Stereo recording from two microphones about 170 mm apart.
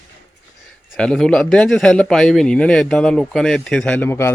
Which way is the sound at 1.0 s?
5° left (ahead or behind).